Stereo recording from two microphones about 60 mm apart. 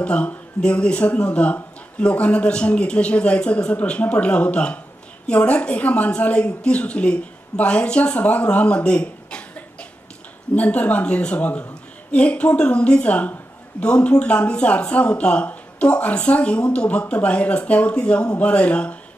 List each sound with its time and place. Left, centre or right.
0.0 s speech: left